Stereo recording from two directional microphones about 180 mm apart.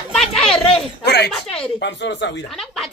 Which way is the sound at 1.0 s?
65° left (ahead or behind).